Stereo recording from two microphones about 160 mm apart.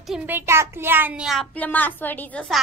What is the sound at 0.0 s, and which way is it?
Speech, 5° right (ahead or behind).